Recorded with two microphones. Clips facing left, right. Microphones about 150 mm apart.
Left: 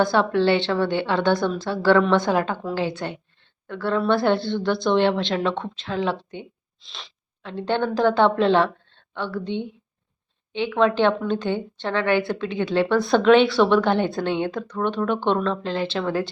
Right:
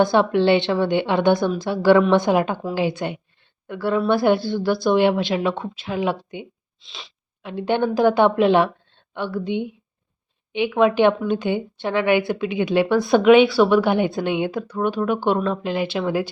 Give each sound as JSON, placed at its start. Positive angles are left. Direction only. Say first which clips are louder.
{"t": 0.0, "sound": "a woman's voice", "louder": "right 2 dB", "side_deg": -20}
{"t": 6.7, "sound": "sneeze", "louder": "right 1 dB", "side_deg": 0}
{"t": 7.4, "sound": "a woman's voice", "louder": "right 3 dB", "side_deg": -10}